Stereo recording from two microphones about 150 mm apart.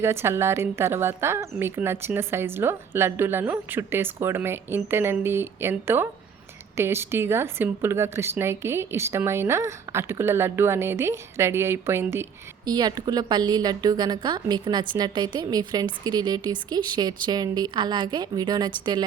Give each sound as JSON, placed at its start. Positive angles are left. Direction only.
{"t": 0.0, "sound": "speech", "side_deg": -15}